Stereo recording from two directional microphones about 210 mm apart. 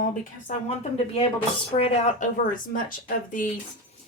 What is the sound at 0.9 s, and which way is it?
Speech, 30° left (ahead or behind).